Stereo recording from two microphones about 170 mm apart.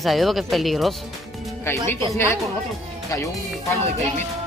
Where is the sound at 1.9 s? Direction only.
15° left (ahead or behind).